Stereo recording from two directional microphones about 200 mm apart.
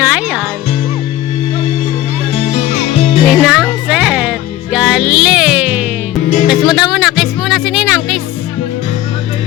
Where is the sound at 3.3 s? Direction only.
5° right (ahead or behind).